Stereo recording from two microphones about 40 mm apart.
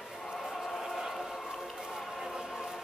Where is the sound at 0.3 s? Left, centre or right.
Centre.